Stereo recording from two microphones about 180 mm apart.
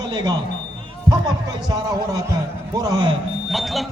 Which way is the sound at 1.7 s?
20° right (ahead or behind).